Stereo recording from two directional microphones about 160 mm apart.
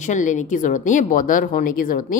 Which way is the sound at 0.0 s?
50° left (ahead or behind).